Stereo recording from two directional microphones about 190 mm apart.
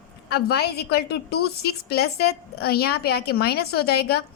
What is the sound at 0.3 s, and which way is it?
A woman's voice, 55° left (ahead or behind).